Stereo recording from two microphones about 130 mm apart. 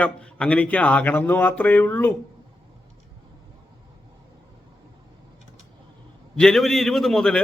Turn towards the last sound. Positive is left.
turn(degrees=5)  # may be behind; listen again after turning